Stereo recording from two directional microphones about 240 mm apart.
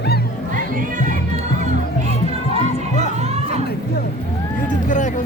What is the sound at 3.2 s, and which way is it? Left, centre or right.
Chatter, right.